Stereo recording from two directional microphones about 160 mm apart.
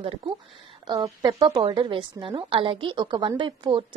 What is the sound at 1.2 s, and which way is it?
A woman's voice, 25° right (ahead or behind).